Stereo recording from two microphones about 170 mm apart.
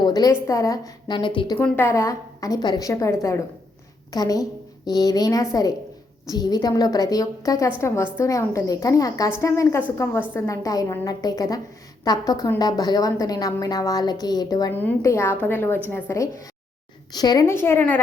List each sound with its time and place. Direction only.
0.0 s a woman's voice: 20° left (ahead or behind)
1.5 s a woman's voice: 10° left (ahead or behind)
14.7 s a woman's voice: 10° left (ahead or behind)